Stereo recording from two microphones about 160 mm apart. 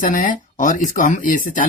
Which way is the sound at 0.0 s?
55° left (ahead or behind).